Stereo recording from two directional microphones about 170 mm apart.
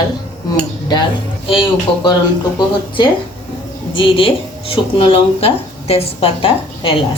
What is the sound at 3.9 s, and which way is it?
Speech, 30° left (ahead or behind).